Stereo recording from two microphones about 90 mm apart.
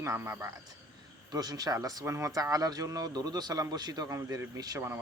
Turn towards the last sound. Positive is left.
turn(degrees=-45)  # may be behind; listen again after turning